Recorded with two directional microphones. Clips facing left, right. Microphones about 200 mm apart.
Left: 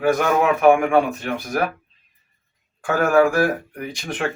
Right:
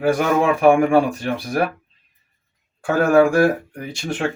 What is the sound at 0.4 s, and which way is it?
Speech, 30° right (ahead or behind).